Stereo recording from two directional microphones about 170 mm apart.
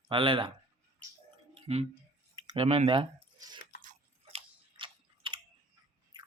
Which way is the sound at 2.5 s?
35° right (ahead or behind).